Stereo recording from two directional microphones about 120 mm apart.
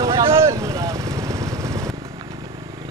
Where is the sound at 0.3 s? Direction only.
25° right (ahead or behind).